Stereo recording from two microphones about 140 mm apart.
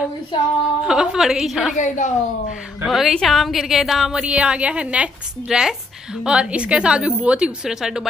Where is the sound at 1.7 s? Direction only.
60° left (ahead or behind).